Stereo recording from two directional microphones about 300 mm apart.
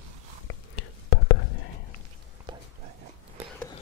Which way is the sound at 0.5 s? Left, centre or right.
Left.